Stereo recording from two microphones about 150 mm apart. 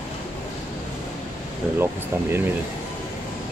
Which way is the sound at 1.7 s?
15° right (ahead or behind).